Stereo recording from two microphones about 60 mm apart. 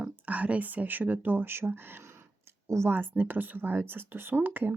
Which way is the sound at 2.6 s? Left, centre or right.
Right.